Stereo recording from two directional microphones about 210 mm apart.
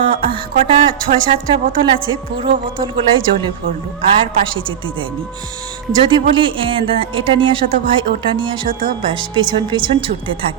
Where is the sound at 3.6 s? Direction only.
65° right (ahead or behind).